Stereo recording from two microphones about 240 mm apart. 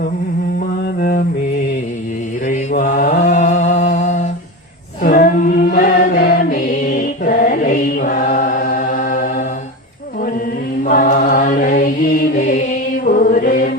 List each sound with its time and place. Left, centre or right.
0.9 s mantra: left
2.5 s mantra: left
5.0 s chant: left
10.8 s mantra: left